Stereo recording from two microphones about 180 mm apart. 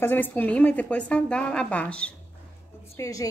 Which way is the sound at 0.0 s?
10° left (ahead or behind).